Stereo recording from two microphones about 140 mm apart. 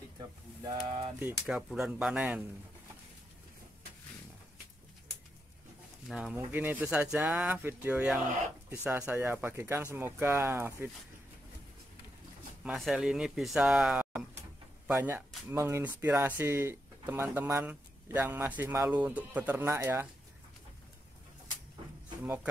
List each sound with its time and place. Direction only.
1.2 s speech: 5° right (ahead or behind)
6.0 s speech: centre (ahead or behind)
6.3 s speech: 15° right (ahead or behind)
12.6 s speech: 5° right (ahead or behind); by 20.1 s 20° right (ahead or behind)
22.2 s speech: 10° right (ahead or behind)